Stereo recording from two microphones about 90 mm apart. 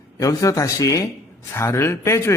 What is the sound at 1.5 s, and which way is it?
Speech, 30° left (ahead or behind).